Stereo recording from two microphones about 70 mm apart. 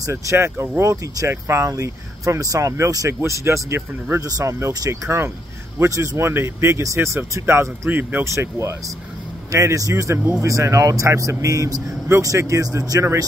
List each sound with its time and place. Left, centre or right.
0.0 s speech: right
3.1 s speech: right
4.2 s speech: right
7.9 s speech: right
8.2 s speech: right